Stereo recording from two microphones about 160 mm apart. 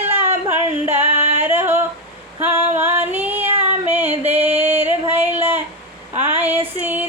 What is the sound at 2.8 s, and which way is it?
Female singing, 10° right (ahead or behind).